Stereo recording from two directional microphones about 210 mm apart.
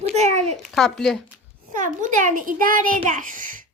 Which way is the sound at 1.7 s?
40° right (ahead or behind).